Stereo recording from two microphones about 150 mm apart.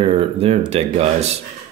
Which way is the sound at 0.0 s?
35° right (ahead or behind).